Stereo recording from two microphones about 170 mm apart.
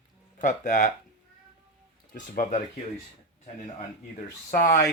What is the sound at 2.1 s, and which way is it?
Speech, 45° left (ahead or behind).